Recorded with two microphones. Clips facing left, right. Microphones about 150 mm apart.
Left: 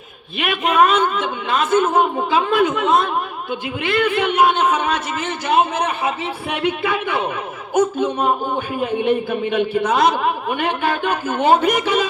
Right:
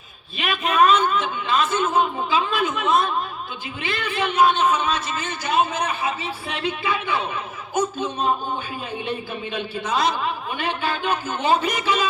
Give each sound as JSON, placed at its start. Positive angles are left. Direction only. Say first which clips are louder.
{"t": 0.3, "sound": "a man's voice", "louder": "left 3 dB", "side_deg": 60}